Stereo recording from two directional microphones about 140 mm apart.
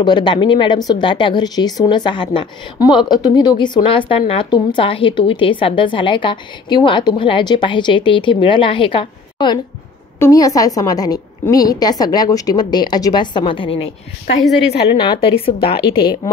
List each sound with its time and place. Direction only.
0.0 s a woman's voice: 35° left (ahead or behind)
10.1 s a woman's voice: 20° left (ahead or behind); by 13.8 s 35° left (ahead or behind)
14.9 s a woman's voice: 35° left (ahead or behind)